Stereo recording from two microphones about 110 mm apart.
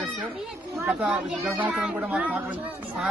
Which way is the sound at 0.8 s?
10° right (ahead or behind).